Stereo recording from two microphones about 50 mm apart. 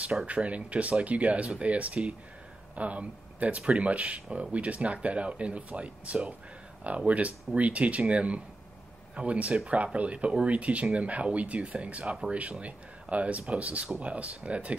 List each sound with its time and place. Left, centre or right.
0.3 s speech: right